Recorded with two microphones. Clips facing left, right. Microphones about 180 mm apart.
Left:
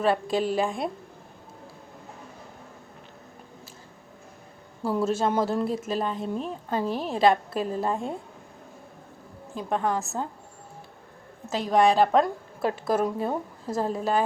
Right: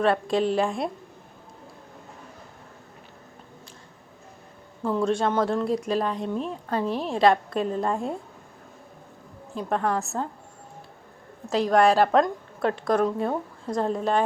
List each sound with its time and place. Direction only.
0.0 s speech: centre (ahead or behind)
4.8 s speech: 5° left (ahead or behind)
9.6 s speech: centre (ahead or behind)
11.4 s speech: centre (ahead or behind)